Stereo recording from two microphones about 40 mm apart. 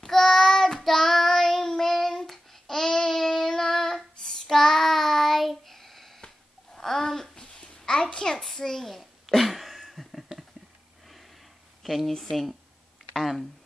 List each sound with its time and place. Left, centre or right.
0.0 s child singing: centre
6.7 s babbling: centre
8.5 s a sound: centre
11.8 s a sound: centre
12.1 s speech: centre
13.1 s speech: centre